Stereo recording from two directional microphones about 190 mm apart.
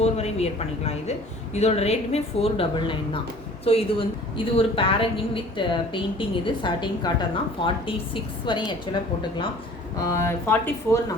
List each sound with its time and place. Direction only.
0.0 s a woman's voice: 35° left (ahead or behind)
10.0 s speech: 15° left (ahead or behind)